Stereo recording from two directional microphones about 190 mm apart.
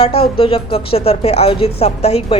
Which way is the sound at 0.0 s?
30° left (ahead or behind).